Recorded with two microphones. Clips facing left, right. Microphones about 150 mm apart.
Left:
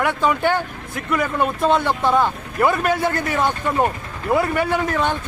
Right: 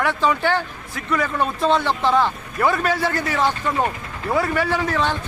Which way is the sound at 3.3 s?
15° left (ahead or behind).